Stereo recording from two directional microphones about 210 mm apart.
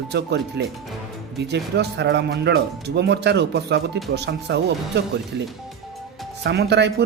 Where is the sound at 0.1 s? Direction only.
55° right (ahead or behind).